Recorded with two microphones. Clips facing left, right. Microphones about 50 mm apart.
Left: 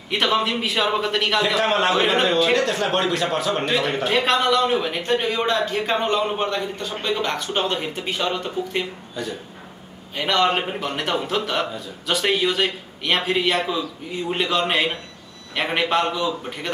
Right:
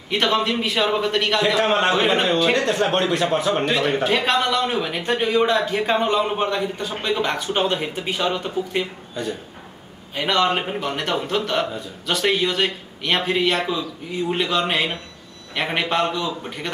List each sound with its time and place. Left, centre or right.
0.1 s a man's voice: centre
3.1 s a man's voice: right
3.6 s a man's voice: centre